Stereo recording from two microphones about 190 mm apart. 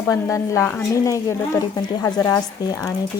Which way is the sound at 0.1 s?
15° left (ahead or behind).